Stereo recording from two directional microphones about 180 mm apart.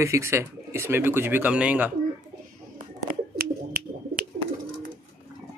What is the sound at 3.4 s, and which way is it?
Bird, 55° right (ahead or behind).